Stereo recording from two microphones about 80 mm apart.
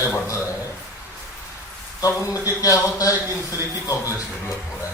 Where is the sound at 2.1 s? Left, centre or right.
Left.